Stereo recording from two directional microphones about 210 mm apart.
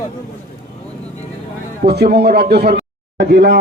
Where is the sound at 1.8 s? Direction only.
50° right (ahead or behind).